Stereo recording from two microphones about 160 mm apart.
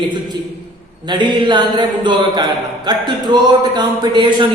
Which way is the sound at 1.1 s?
30° right (ahead or behind).